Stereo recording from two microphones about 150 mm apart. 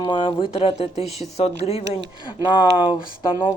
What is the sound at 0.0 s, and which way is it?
Speech, 35° left (ahead or behind).